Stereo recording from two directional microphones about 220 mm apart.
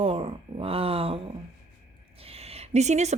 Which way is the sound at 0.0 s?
25° right (ahead or behind).